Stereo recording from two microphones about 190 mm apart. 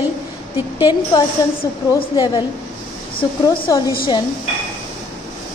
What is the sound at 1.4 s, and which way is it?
A woman's voice, 20° left (ahead or behind).